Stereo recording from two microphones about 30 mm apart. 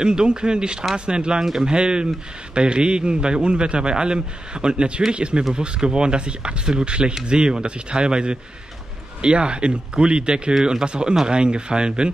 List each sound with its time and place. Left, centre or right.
0.0 s a man's voice: right